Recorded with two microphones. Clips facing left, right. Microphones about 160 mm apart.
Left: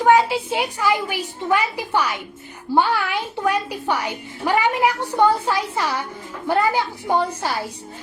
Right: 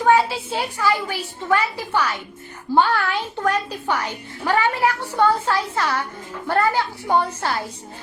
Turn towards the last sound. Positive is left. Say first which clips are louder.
# left 1 dB
turn(degrees=10)  # may be behind; listen again after turning